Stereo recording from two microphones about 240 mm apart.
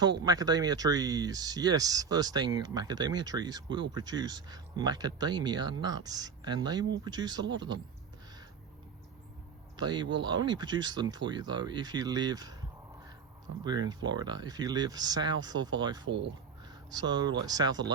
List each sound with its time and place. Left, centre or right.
0.0 s speech: centre
9.7 s speech: centre
13.7 s speech: centre
16.0 s speech: right
16.6 s speech: centre